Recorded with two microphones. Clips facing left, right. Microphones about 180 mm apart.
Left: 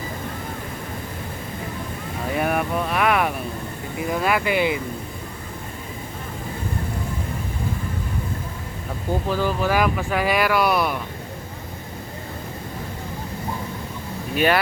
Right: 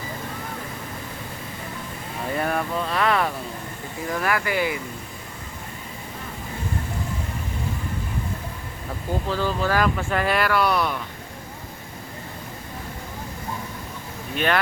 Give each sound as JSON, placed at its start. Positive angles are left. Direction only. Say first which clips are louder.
{"t": 2.3, "sound": "speech", "louder": "left 2 dB", "side_deg": 10}
{"t": 9.3, "sound": "speech", "louder": "left 1 dB", "side_deg": 15}
{"t": 14.3, "sound": "speech", "louder": "left 3 dB", "side_deg": 5}